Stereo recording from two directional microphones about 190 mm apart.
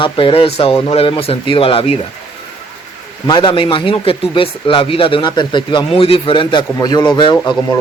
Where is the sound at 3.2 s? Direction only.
25° left (ahead or behind).